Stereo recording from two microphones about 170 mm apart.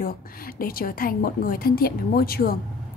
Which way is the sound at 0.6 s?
60° left (ahead or behind).